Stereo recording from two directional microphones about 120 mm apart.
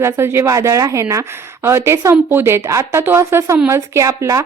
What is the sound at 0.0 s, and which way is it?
A woman's voice, 20° right (ahead or behind).